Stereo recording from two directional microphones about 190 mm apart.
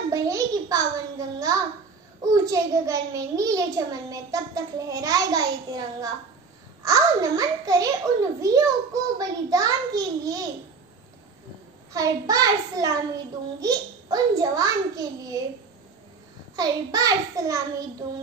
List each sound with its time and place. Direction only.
0.1 s a child's voice: 15° right (ahead or behind)
11.9 s a child's voice: 20° right (ahead or behind)
16.5 s a child's voice: 20° right (ahead or behind)